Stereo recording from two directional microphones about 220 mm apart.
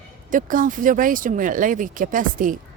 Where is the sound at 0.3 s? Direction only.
35° right (ahead or behind).